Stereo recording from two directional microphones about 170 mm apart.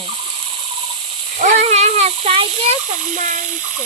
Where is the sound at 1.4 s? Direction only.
40° right (ahead or behind).